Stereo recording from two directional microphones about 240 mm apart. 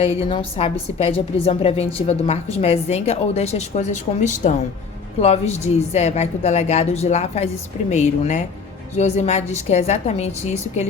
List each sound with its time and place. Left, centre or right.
0.0 s a woman's voice: left